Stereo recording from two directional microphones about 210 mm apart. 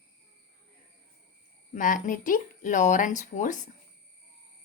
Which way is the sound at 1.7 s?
40° left (ahead or behind).